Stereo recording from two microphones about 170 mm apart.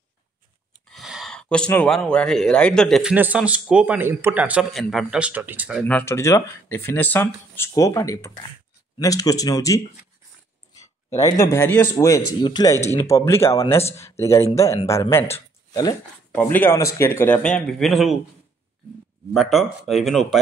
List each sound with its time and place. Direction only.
0.9 s speech: centre (ahead or behind)
5.9 s speech: 10° left (ahead or behind)
10.8 s speech: 20° left (ahead or behind)
15.3 s a sound: 20° left (ahead or behind)
16.3 s speech: 10° left (ahead or behind)
19.3 s speech: centre (ahead or behind)